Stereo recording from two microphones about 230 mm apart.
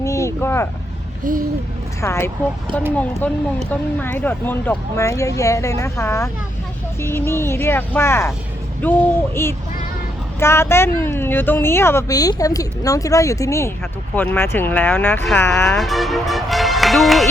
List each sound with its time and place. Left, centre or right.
0.0 s vehicle: centre
1.2 s hoot: right
2.0 s a woman's voice: centre
3.7 s a woman's voice: centre
15.8 s speech: centre